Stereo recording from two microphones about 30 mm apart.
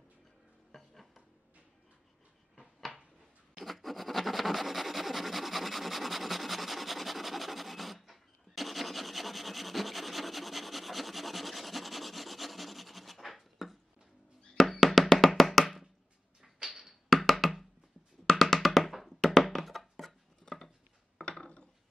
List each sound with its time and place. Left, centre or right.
0.7 s dishes: centre
3.6 s rub: centre
14.7 s music: centre
16.5 s a sound: right
16.8 s knock: centre
18.2 s music: centre
20.4 s a sound: left
21.3 s wood: left